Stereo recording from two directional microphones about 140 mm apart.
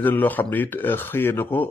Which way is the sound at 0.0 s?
15° left (ahead or behind).